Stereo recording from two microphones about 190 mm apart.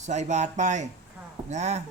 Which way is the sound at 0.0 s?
40° right (ahead or behind).